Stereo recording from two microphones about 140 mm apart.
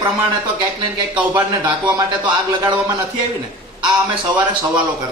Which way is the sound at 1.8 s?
35° right (ahead or behind).